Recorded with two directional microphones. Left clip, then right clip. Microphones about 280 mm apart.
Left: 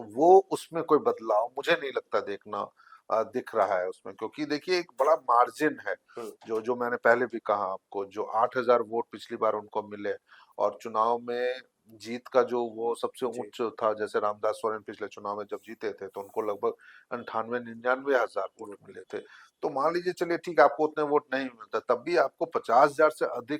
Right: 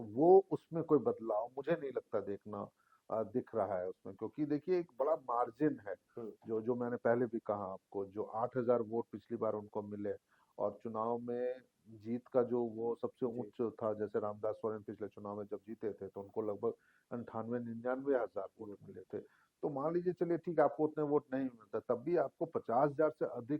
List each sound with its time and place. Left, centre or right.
0.2 s speech: left
0.5 s speech: centre
12.6 s speech: left
12.9 s speech: centre